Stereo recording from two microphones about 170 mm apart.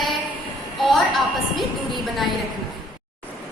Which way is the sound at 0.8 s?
Centre (ahead or behind).